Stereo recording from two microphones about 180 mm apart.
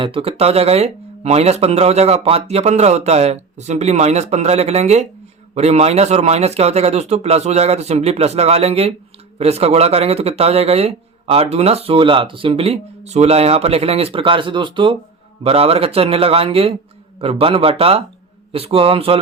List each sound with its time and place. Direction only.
0.0 s speech: 30° right (ahead or behind)